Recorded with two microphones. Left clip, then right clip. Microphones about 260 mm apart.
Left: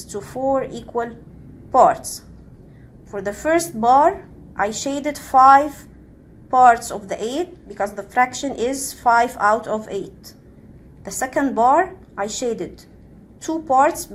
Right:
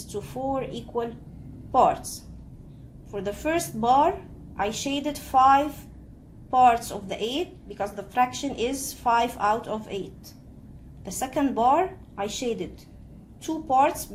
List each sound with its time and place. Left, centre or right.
0.1 s a woman's voice: centre
3.1 s a woman's voice: centre
11.0 s a woman's voice: centre